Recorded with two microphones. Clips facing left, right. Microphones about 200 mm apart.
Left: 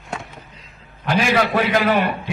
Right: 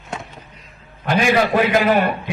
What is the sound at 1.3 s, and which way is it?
Speech, 45° right (ahead or behind).